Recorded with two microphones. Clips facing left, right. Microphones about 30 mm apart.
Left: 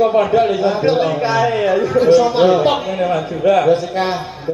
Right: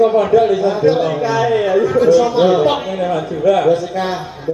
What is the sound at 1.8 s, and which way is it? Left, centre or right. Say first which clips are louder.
Speech: even; left.